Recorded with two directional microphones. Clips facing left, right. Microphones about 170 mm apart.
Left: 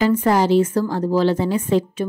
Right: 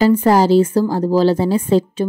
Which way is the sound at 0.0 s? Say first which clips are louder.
Right 4 dB; 35° right (ahead or behind).